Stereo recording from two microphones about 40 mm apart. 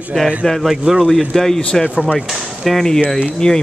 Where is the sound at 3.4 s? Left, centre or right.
Left.